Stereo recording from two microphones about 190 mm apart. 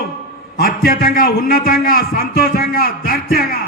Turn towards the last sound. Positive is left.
turn(degrees=50)  # may be behind; listen again after turning